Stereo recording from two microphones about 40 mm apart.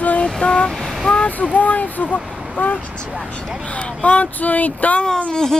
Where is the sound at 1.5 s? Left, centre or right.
Left.